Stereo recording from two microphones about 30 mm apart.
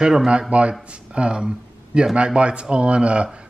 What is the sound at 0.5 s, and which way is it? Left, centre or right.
Speech, right.